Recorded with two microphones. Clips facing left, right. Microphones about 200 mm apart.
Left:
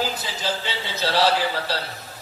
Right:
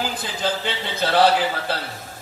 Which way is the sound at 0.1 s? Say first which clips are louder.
Right 3 dB; 55° right (ahead or behind).